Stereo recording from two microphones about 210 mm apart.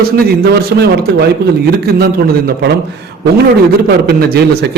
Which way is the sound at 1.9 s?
45° right (ahead or behind).